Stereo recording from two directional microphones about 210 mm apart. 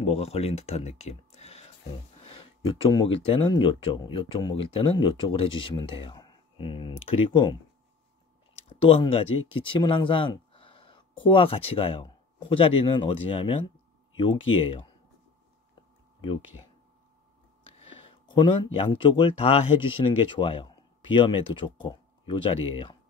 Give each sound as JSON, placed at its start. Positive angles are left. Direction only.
{"t": 0.0, "sound": "speech", "side_deg": 30}
{"t": 8.6, "sound": "speech", "side_deg": 25}
{"t": 15.7, "sound": "a sound", "side_deg": 25}
{"t": 17.6, "sound": "speech", "side_deg": 25}